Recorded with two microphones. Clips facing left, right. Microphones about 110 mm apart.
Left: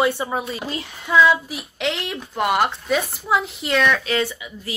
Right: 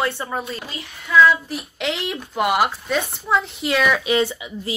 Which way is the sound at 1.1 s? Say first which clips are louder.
Right 1 dB; 25° left (ahead or behind).